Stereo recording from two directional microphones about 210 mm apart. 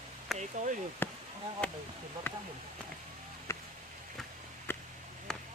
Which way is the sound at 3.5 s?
15° left (ahead or behind).